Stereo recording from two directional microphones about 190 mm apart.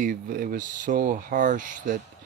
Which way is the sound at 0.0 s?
45° right (ahead or behind).